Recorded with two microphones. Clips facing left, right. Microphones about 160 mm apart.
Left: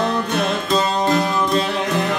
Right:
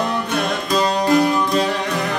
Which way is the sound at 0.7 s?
25° left (ahead or behind).